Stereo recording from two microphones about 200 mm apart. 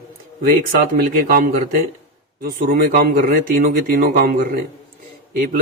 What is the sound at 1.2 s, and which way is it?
Speech, 45° right (ahead or behind).